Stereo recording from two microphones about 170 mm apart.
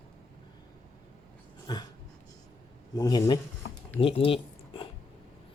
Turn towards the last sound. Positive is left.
turn(degrees=30)  # may be behind; listen again after turning